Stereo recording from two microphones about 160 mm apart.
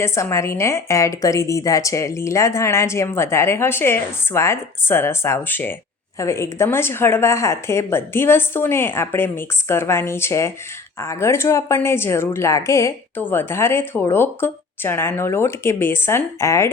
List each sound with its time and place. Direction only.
0.0 s a woman's voice: 15° left (ahead or behind)